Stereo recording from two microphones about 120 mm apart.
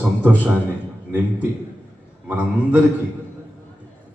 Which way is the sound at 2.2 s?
15° right (ahead or behind).